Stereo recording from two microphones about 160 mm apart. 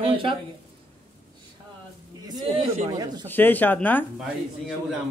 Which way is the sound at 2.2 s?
25° right (ahead or behind).